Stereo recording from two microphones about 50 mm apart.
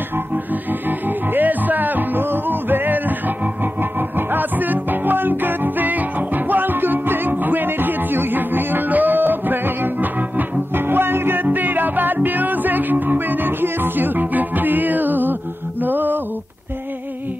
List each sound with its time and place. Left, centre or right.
0.8 s music: right
4.3 s music: right
10.9 s music: right
11.4 s music: right